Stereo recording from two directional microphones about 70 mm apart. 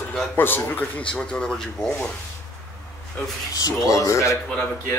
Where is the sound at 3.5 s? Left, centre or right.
Left.